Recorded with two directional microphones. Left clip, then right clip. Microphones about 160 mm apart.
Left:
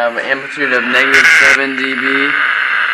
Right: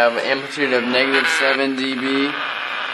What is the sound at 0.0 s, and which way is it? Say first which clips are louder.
Speech: left 2 dB; 10° right (ahead or behind).